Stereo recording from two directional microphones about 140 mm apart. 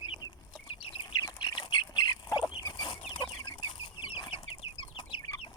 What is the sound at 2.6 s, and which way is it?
Chicken, 35° left (ahead or behind).